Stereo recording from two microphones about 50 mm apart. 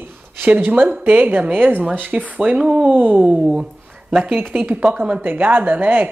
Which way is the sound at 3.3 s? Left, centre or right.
Centre.